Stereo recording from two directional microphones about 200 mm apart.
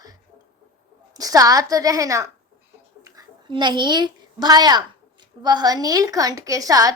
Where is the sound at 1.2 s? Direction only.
15° right (ahead or behind).